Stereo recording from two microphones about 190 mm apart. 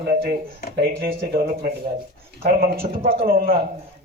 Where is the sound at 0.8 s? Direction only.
55° right (ahead or behind).